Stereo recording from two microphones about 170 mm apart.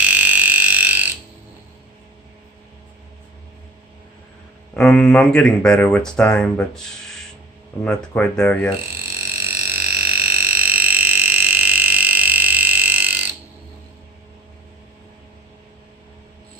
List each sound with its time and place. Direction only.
0.0 s fire alarm: 10° right (ahead or behind)
4.7 s speech: 5° left (ahead or behind)
7.9 s speech: 5° left (ahead or behind)
9.4 s burping: 15° right (ahead or behind)